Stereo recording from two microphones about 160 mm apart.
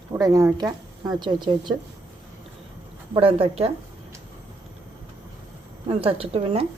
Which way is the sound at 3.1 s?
35° right (ahead or behind).